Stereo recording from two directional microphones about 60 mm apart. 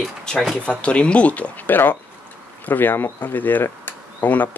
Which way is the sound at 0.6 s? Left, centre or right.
Centre.